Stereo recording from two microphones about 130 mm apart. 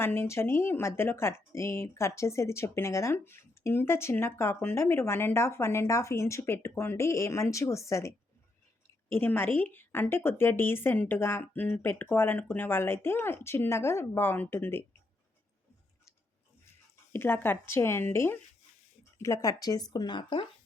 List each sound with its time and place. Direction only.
0.0 s a woman's voice: 20° left (ahead or behind)
17.1 s a woman's voice: 15° left (ahead or behind); by 20.5 s 40° left (ahead or behind)